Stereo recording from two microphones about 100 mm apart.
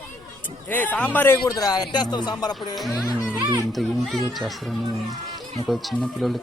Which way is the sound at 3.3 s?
30° right (ahead or behind).